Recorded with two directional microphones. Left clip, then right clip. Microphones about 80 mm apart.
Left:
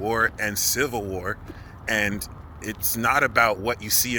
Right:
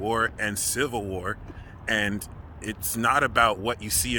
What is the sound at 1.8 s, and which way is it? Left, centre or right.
Speech, right.